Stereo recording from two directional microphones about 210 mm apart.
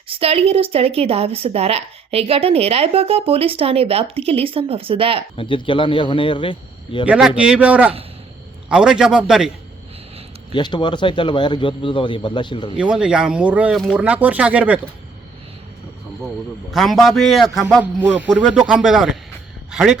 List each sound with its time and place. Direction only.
0.1 s a woman's voice: 30° right (ahead or behind)
5.4 s speech: 25° left (ahead or behind)
7.1 s a man's voice: 5° right (ahead or behind)
10.5 s speech: 20° left (ahead or behind)
12.7 s a man's voice: 5° right (ahead or behind)
16.7 s a man's voice: centre (ahead or behind)